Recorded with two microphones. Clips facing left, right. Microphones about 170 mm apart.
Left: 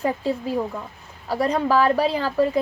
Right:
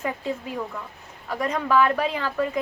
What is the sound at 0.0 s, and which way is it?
A woman's voice, 35° left (ahead or behind).